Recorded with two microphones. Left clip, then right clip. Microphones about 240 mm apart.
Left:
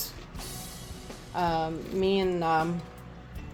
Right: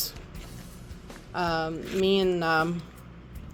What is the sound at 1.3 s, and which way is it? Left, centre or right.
Speech, centre.